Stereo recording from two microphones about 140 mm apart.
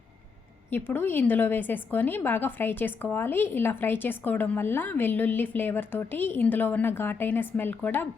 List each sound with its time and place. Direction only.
0.7 s a woman's voice: 15° left (ahead or behind)